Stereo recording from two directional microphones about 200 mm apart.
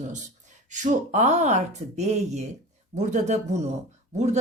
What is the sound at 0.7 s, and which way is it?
Speech, 40° right (ahead or behind).